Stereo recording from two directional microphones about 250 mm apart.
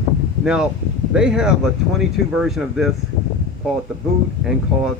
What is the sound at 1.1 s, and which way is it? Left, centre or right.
Speech, centre.